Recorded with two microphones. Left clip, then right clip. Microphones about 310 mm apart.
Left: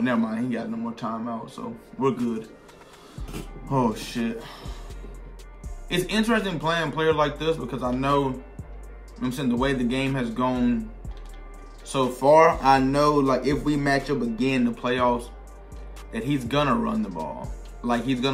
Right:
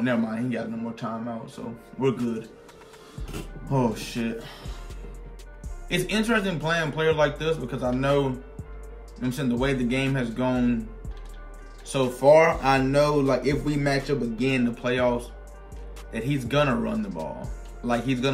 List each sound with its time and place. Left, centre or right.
0.0 s speech: centre
3.6 s speech: centre
5.9 s speech: centre
11.9 s speech: centre